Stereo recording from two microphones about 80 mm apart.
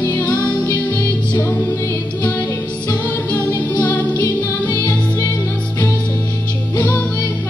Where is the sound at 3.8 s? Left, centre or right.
Left.